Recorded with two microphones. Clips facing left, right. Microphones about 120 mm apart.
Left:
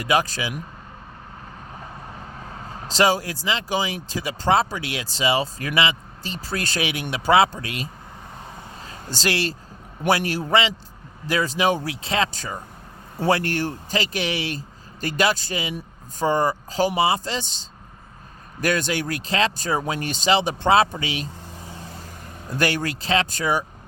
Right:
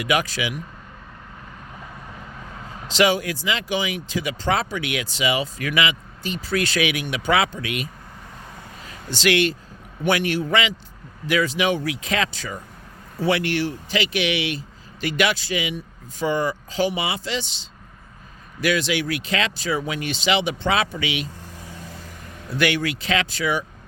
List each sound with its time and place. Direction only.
0.0 s speech: 35° left (ahead or behind)
2.8 s speech: 40° left (ahead or behind)
8.8 s a sound: 35° left (ahead or behind)
10.1 s speech: 35° left (ahead or behind)
12.3 s speech: 40° left (ahead or behind)
18.6 s speech: 45° left (ahead or behind)
21.6 s vehicle: 30° left (ahead or behind)
22.4 s speech: 40° left (ahead or behind)